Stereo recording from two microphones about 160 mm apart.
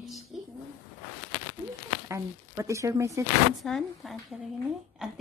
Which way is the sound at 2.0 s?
20° right (ahead or behind).